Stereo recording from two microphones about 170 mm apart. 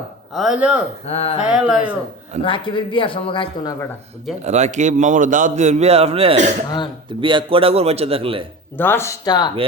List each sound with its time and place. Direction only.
0.3 s speech: 5° right (ahead or behind)
1.0 s speech: 35° left (ahead or behind)
1.5 s speech: 5° right (ahead or behind)
2.4 s speech: 30° left (ahead or behind)
4.4 s a man's voice: 40° right (ahead or behind)
8.8 s speech: 15° left (ahead or behind)